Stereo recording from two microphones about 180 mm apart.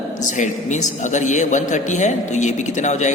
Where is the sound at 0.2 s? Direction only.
45° left (ahead or behind).